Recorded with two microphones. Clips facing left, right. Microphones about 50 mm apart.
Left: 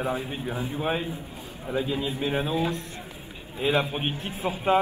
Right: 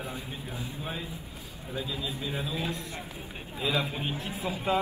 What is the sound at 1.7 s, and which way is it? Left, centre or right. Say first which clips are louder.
A man's voice: left 7 dB; left.